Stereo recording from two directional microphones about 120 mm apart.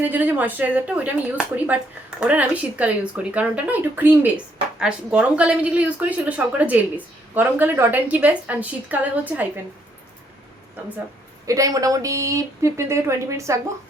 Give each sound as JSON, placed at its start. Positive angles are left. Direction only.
{"t": 0.0, "sound": "a woman's voice", "side_deg": -15}
{"t": 11.4, "sound": "speech", "side_deg": -30}